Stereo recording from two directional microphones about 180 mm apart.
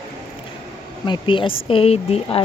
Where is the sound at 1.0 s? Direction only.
25° left (ahead or behind).